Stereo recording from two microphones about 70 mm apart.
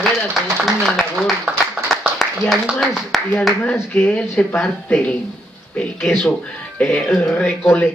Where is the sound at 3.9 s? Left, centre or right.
Left.